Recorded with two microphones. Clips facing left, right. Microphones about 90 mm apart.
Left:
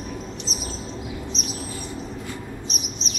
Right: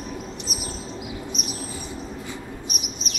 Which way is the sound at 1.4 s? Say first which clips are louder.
Even; 10° right (ahead or behind).